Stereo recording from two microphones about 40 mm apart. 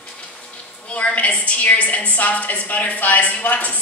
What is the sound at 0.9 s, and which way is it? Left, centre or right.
A woman's voice, left.